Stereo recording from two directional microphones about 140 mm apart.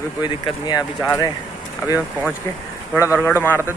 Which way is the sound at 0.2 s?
30° left (ahead or behind).